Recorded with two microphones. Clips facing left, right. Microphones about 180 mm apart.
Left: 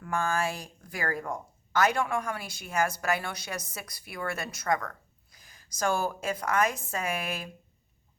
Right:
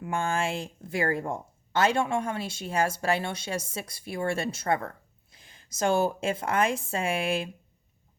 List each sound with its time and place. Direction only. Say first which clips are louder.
0.0 s a woman's voice: right 1 dB; 25° right (ahead or behind)